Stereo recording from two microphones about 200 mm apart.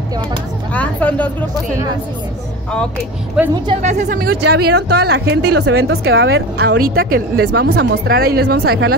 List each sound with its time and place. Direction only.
0.7 s a woman's voice: 5° left (ahead or behind)
3.4 s a woman's voice: 5° right (ahead or behind)
3.8 s a woman's voice: 40° right (ahead or behind)
5.6 s a woman's voice: 75° right (ahead or behind); by 8.9 s 60° right (ahead or behind)